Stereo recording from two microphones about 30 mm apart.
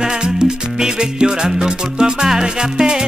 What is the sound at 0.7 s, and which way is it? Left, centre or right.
Music, right.